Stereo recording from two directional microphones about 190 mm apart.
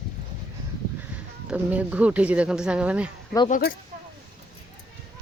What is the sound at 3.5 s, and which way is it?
Speech, 55° left (ahead or behind).